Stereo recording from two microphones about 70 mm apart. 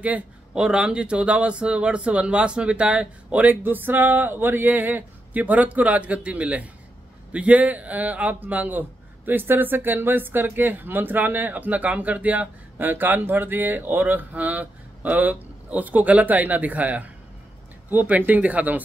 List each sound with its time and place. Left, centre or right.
0.0 s speech: centre
3.6 s a man's voice: right